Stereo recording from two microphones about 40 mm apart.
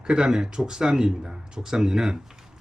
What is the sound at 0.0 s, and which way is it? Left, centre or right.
Speech, centre.